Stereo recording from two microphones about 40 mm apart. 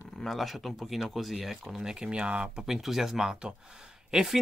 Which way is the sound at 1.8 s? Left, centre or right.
Right.